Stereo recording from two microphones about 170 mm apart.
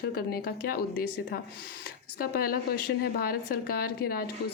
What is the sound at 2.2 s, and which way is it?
A woman's voice, 60° left (ahead or behind).